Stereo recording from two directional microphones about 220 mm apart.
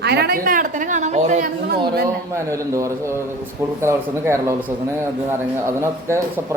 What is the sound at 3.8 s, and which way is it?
Speech, 10° right (ahead or behind).